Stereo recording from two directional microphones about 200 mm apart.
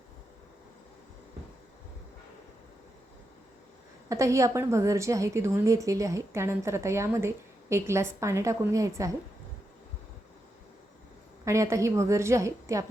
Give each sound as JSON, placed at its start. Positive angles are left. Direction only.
{"t": 4.1, "sound": "a woman's voice", "side_deg": -15}
{"t": 11.4, "sound": "a woman's voice", "side_deg": -15}